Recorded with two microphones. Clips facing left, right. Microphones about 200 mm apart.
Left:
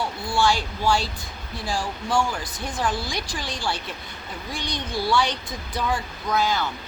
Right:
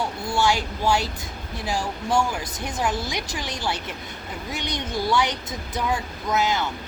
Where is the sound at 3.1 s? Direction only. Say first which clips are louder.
Right 1 dB; 20° right (ahead or behind).